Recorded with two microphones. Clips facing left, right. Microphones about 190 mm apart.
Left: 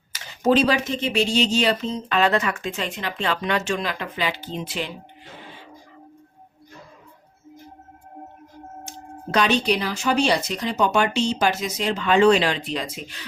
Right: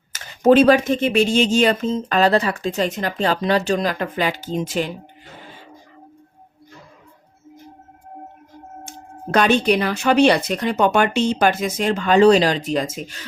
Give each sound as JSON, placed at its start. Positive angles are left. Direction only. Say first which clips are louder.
{"t": 0.1, "sound": "speech", "louder": "right 6 dB", "side_deg": -55}
{"t": 8.8, "sound": "speech", "louder": "right 2 dB", "side_deg": -55}